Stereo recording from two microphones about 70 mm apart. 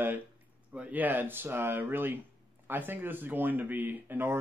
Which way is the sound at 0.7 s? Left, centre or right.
Right.